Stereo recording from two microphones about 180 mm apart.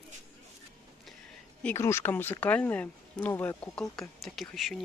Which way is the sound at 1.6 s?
15° left (ahead or behind).